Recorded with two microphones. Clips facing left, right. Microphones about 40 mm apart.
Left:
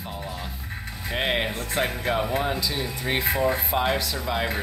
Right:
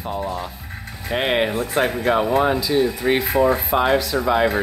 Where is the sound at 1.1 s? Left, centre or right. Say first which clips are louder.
Right 6 dB; centre.